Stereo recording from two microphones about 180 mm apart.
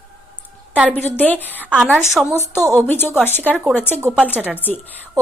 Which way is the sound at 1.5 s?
10° right (ahead or behind).